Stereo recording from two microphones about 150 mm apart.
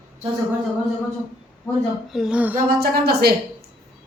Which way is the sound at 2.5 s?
90° right.